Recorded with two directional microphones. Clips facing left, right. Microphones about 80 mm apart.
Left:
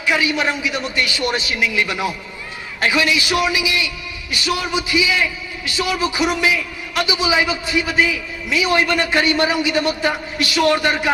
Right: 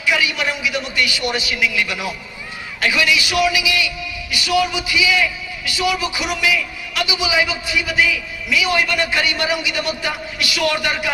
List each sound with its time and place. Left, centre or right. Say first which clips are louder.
0.0 s a man's voice: left 1 dB; left